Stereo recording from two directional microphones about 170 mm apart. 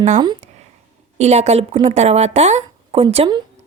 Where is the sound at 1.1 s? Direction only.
40° right (ahead or behind).